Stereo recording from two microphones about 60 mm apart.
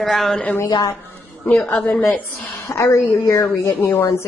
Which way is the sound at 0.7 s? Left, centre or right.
Left.